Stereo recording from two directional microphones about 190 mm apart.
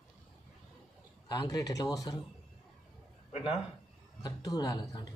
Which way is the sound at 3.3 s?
30° left (ahead or behind).